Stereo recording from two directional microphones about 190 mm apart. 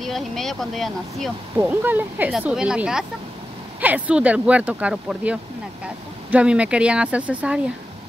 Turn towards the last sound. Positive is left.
turn(degrees=-5)  # may be behind; listen again after turning